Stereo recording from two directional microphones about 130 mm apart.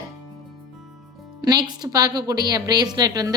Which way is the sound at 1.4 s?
30° right (ahead or behind).